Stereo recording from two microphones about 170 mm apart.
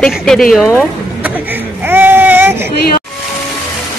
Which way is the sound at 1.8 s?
10° right (ahead or behind).